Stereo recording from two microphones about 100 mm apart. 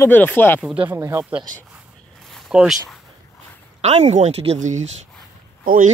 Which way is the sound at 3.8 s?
90° right.